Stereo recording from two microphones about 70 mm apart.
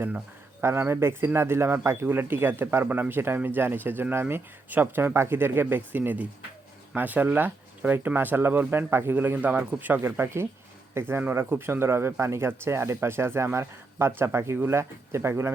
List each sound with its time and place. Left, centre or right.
0.6 s speech: right